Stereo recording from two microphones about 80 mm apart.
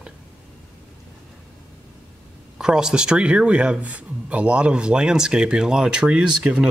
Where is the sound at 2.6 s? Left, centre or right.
Centre.